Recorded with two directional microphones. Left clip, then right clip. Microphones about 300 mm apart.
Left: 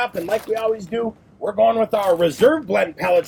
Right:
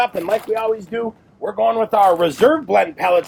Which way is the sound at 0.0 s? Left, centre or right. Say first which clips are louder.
Right 4 dB; right.